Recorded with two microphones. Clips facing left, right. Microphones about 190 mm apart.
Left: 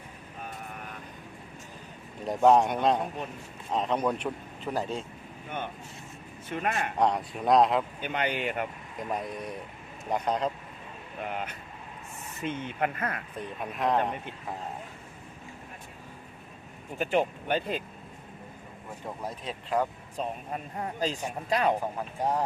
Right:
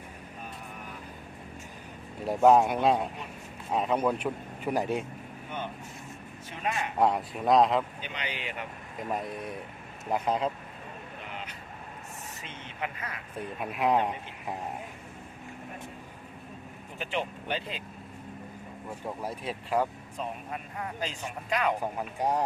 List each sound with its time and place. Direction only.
2.2 s speech: 5° right (ahead or behind)
6.5 s speech: 55° left (ahead or behind)
7.0 s speech: 5° right (ahead or behind)
8.0 s speech: 50° left (ahead or behind)
9.0 s speech: centre (ahead or behind)
11.2 s vehicle: 50° left (ahead or behind)
12.4 s speech: 55° left (ahead or behind)
13.6 s speech: 10° right (ahead or behind)
17.0 s speech: 45° left (ahead or behind)
19.2 s speech: 10° right (ahead or behind)
20.1 s speech: 35° left (ahead or behind)
21.9 s speech: 15° right (ahead or behind)